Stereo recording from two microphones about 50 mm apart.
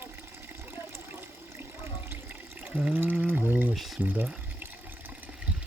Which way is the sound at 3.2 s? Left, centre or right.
Right.